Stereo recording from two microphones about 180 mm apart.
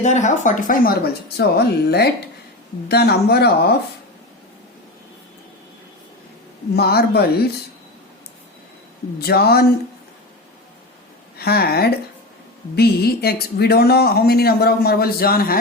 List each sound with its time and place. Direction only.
0.0 s a woman's voice: 40° left (ahead or behind); by 3.8 s 65° left (ahead or behind)
6.7 s speech: 60° left (ahead or behind)
9.2 s speech: 60° left (ahead or behind)
11.3 s speech: 60° left (ahead or behind)